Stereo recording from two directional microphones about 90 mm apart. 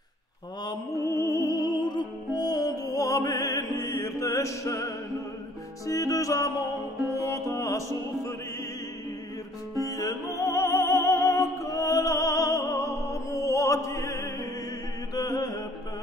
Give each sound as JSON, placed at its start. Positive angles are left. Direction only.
{"t": 0.9, "sound": "music", "side_deg": 30}
{"t": 9.8, "sound": "music", "side_deg": 35}